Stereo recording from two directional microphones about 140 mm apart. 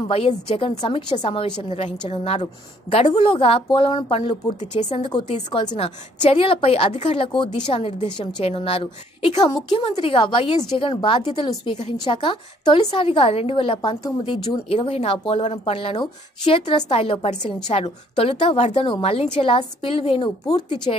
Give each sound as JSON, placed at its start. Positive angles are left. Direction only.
{"t": 0.1, "sound": "a woman's voice", "side_deg": 45}
{"t": 9.2, "sound": "a woman's voice", "side_deg": 30}
{"t": 9.8, "sound": "a woman's voice", "side_deg": 40}